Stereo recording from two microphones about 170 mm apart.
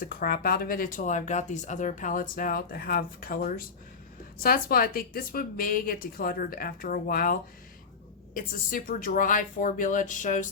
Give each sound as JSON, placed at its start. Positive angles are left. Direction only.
{"t": 0.0, "sound": "speech", "side_deg": 60}